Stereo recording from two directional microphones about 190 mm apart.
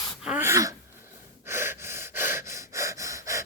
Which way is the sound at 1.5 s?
10° right (ahead or behind).